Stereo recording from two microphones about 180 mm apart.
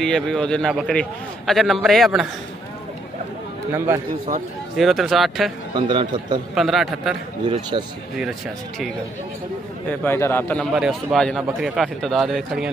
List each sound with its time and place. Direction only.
0.0 s a man's voice: 5° left (ahead or behind)
3.7 s a man's voice: 15° right (ahead or behind)
4.7 s a man's voice: centre (ahead or behind)
5.8 s a man's voice: 25° right (ahead or behind)
6.5 s a man's voice: centre (ahead or behind)
7.7 s speech: 30° right (ahead or behind)
8.2 s a man's voice: centre (ahead or behind)
9.8 s a man's voice: 15° left (ahead or behind)
10.7 s a man's voice: 5° right (ahead or behind)